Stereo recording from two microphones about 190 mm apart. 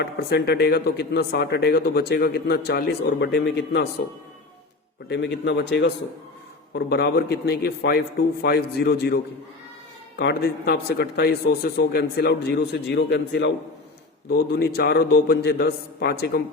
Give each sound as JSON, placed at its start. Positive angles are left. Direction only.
{"t": 0.0, "sound": "speech", "side_deg": 60}
{"t": 5.0, "sound": "speech", "side_deg": 65}
{"t": 10.2, "sound": "speech", "side_deg": 55}